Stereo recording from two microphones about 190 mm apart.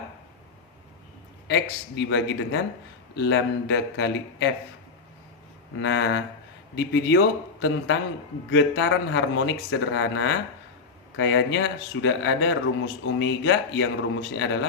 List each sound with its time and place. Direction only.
1.5 s speech: 65° left (ahead or behind)
5.8 s speech: 75° left (ahead or behind)